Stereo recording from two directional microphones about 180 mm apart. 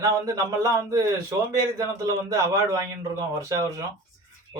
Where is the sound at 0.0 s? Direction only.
15° right (ahead or behind).